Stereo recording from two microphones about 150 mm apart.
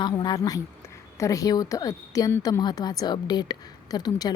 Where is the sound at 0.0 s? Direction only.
25° left (ahead or behind).